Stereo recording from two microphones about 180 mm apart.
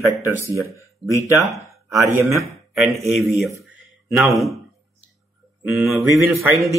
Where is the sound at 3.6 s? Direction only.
Centre (ahead or behind).